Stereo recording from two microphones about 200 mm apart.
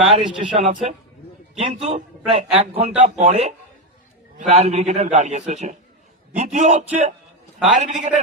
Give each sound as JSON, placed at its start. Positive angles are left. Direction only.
{"t": 0.0, "sound": "a man's voice", "side_deg": -30}